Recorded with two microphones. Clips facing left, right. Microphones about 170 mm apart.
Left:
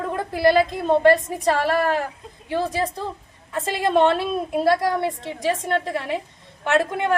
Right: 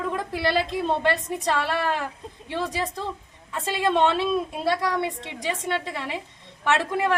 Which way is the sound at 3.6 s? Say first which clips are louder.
Left 3 dB; 50° left (ahead or behind).